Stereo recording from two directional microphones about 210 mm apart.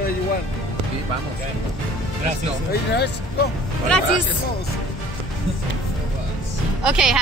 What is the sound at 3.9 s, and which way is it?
Speech, 5° left (ahead or behind).